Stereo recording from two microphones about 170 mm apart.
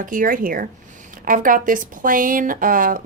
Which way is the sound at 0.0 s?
50° right (ahead or behind).